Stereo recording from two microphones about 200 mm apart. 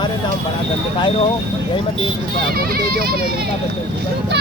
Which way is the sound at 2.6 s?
50° right (ahead or behind).